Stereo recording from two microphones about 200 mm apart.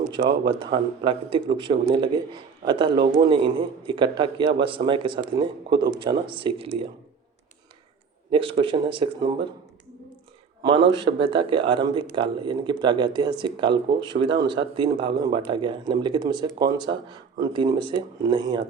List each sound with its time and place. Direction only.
0.1 s speech: 25° right (ahead or behind)
8.3 s speech: 25° right (ahead or behind)
10.6 s speech: 25° right (ahead or behind)